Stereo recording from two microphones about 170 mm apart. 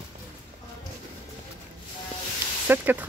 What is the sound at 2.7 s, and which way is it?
Speech, 10° right (ahead or behind).